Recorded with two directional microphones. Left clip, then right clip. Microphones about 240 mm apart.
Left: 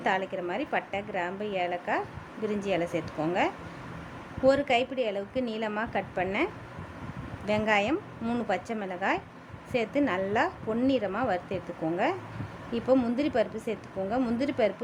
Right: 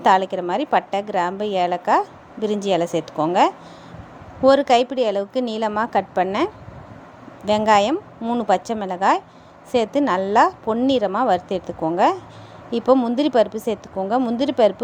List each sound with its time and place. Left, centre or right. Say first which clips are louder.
0.0 s a woman's voice: right 12 dB; right